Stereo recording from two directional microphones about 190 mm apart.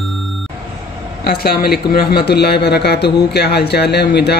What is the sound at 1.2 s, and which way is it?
Speech, 55° left (ahead or behind).